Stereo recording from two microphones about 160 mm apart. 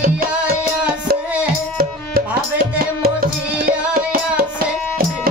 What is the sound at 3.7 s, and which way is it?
Music, 65° right (ahead or behind).